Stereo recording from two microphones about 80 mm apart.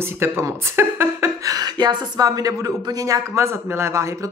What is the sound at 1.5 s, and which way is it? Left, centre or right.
A woman's voice, right.